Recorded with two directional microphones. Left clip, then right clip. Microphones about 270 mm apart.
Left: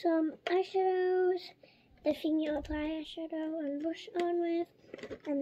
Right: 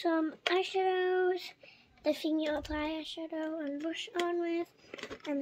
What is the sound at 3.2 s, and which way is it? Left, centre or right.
Speech, right.